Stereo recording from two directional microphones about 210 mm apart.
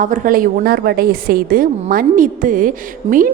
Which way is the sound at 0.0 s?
40° right (ahead or behind).